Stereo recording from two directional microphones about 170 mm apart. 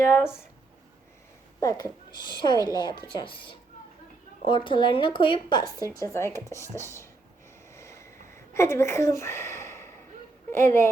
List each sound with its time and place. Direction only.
0.0 s speech: 15° left (ahead or behind)
1.6 s speech: 25° left (ahead or behind)
7.7 s vehicle: 15° left (ahead or behind)
8.5 s speech: 15° left (ahead or behind)